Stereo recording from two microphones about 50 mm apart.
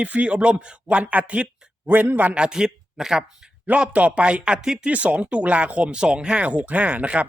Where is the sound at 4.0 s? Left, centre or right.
Right.